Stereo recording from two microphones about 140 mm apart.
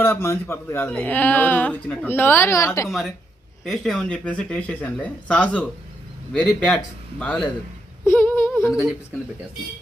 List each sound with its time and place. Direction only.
0.0 s speech: 20° left (ahead or behind)
3.6 s speech: centre (ahead or behind)
8.0 s a sound: 15° left (ahead or behind)
8.7 s speech: 5° right (ahead or behind)